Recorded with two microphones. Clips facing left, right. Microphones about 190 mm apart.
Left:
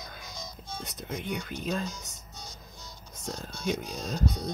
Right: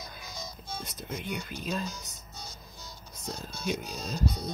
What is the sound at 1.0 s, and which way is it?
Speech, 15° left (ahead or behind).